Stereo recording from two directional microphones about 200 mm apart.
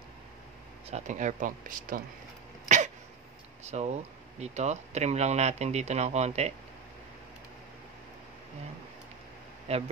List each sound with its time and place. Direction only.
0.8 s speech: 35° right (ahead or behind)
3.6 s speech: 35° right (ahead or behind)
9.7 s speech: 30° right (ahead or behind)